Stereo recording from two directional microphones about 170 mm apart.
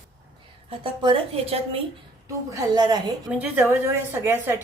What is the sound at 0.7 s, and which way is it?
A woman's voice, 30° right (ahead or behind).